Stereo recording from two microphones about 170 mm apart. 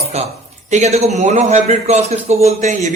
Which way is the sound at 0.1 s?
40° right (ahead or behind).